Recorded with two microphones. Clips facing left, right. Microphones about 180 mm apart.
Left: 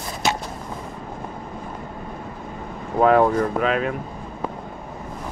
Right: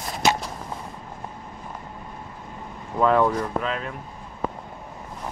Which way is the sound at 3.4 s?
75° left (ahead or behind).